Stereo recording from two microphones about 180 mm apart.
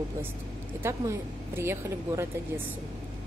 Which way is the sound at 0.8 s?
15° right (ahead or behind).